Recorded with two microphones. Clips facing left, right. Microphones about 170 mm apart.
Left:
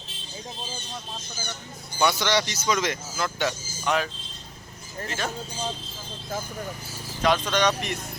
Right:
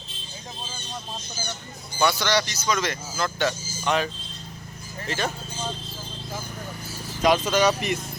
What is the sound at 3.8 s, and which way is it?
Speech, centre (ahead or behind).